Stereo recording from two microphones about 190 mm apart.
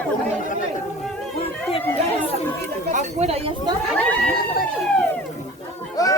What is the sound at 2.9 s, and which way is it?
Speech, 35° right (ahead or behind).